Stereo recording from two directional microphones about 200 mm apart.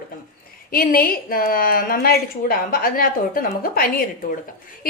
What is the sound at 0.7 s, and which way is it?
A woman's voice, 45° left (ahead or behind).